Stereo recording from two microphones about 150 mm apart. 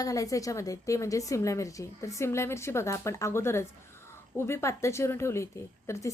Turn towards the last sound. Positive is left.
turn(degrees=20)  # may be behind; listen again after turning